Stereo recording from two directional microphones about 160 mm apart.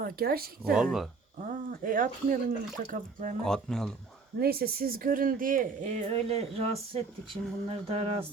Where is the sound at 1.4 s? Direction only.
55° right (ahead or behind).